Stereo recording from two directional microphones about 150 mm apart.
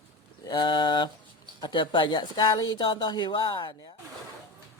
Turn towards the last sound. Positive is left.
turn(degrees=30)  # may be behind; listen again after turning